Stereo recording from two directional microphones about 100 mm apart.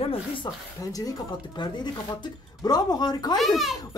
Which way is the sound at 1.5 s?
50° left (ahead or behind).